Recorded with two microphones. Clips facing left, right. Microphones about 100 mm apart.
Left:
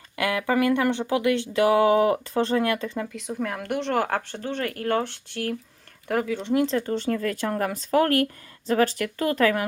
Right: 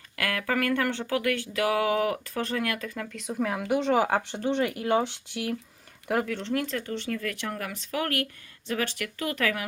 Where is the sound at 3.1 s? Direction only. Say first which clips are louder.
Even; centre (ahead or behind).